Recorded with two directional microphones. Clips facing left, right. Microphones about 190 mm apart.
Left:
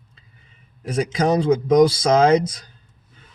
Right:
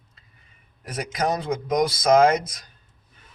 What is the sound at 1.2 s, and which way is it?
Speech, 30° left (ahead or behind).